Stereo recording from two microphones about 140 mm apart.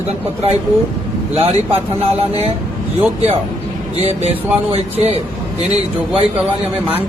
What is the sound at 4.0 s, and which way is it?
A man's voice, 50° right (ahead or behind).